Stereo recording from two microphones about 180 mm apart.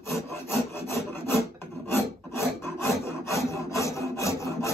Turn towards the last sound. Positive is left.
turn(degrees=15)  # may be behind; listen again after turning